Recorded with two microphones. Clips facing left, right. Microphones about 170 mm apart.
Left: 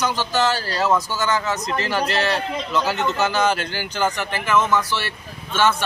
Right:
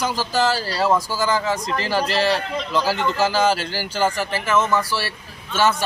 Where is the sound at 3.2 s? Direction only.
30° right (ahead or behind).